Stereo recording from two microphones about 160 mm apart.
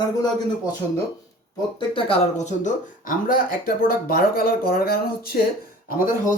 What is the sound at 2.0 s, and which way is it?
Speech, 45° left (ahead or behind).